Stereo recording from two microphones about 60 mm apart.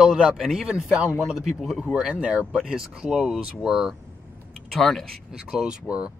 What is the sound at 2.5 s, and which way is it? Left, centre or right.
Speech, centre.